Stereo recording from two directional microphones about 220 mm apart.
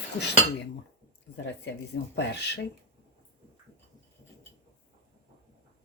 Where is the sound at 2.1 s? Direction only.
50° left (ahead or behind).